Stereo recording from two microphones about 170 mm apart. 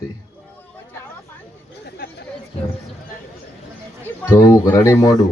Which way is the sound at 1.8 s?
75° left (ahead or behind).